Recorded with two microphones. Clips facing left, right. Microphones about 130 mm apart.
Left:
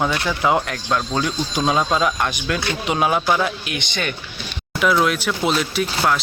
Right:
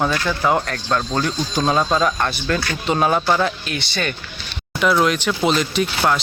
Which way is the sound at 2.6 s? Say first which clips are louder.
Right 1 dB; 20° left (ahead or behind).